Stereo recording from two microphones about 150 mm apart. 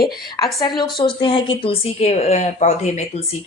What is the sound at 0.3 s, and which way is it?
A woman's voice, 25° left (ahead or behind).